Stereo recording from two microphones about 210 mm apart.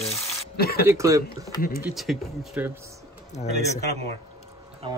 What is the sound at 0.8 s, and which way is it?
Speech, 15° right (ahead or behind).